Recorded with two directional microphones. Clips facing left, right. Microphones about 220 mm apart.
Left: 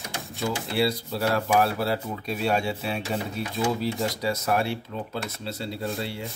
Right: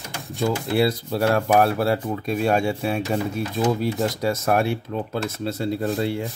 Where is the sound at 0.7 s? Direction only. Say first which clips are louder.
Right 3 dB; 50° right (ahead or behind).